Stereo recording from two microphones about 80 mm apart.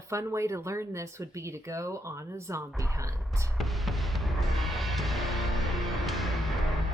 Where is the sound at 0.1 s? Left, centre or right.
Right.